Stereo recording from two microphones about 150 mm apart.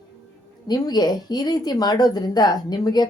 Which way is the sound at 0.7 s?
25° left (ahead or behind).